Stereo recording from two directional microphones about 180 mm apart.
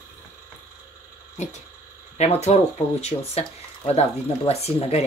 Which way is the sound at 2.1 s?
40° left (ahead or behind).